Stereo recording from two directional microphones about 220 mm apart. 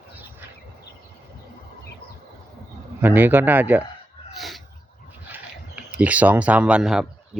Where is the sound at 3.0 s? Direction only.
10° right (ahead or behind).